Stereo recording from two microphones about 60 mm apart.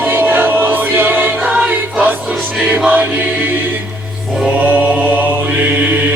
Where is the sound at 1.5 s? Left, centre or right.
Right.